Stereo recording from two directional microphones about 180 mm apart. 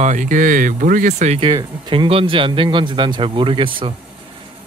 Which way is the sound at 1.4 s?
25° right (ahead or behind).